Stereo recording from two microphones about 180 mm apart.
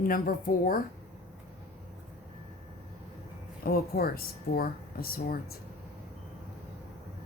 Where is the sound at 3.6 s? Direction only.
55° left (ahead or behind).